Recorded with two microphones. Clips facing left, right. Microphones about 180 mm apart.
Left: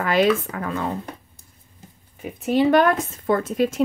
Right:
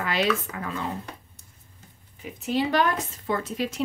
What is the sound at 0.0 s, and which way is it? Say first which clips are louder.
Speech: left 7 dB; 50° left (ahead or behind).